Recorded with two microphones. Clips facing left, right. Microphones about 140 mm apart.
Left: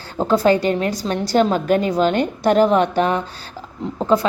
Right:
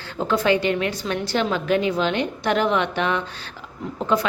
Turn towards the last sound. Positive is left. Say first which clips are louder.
# left 5 dB
turn(degrees=35)  # may be behind; listen again after turning